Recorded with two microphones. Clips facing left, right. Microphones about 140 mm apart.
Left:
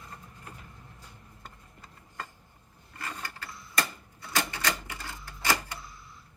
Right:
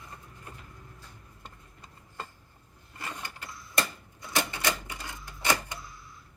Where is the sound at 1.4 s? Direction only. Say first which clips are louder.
Even; 20° right (ahead or behind).